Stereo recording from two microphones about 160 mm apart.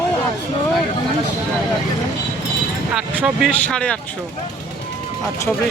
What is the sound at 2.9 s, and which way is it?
Speech, 5° right (ahead or behind).